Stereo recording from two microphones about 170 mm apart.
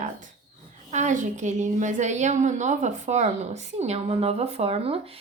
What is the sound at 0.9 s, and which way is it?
A woman's voice, 45° right (ahead or behind).